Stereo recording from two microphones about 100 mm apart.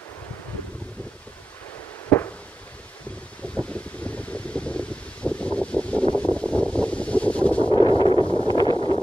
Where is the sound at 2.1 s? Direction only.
15° left (ahead or behind).